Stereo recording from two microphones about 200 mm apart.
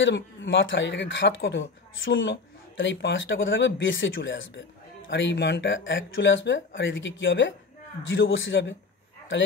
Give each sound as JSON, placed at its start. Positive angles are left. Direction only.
{"t": 0.0, "sound": "speech", "side_deg": 65}